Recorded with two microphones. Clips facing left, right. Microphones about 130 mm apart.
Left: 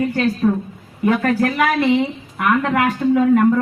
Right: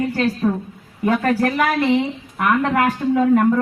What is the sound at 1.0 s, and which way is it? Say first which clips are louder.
A woman's voice: left 1 dB; 35° right (ahead or behind).